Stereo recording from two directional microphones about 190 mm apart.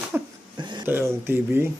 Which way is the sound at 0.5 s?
25° right (ahead or behind).